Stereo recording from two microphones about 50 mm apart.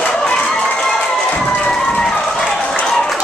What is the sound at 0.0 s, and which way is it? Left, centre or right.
Crowd, centre.